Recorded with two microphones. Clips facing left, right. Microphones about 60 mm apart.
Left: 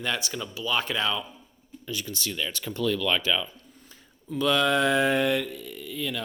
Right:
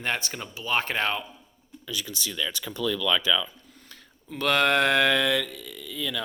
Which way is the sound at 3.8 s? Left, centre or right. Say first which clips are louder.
Left 4 dB; right.